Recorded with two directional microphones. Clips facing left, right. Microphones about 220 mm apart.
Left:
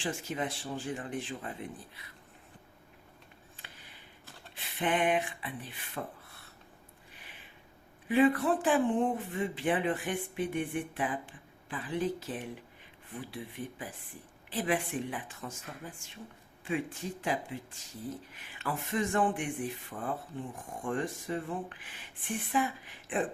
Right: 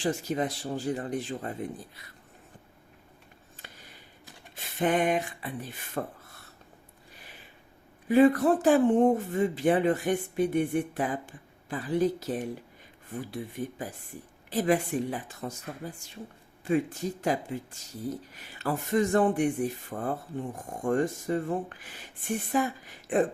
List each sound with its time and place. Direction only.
0.0 s speech: 40° right (ahead or behind)
3.6 s a sound: 40° right (ahead or behind)
4.5 s speech: 40° right (ahead or behind)
8.0 s speech: 40° right (ahead or behind)